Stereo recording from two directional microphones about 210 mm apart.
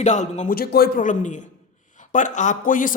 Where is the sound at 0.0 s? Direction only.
35° left (ahead or behind).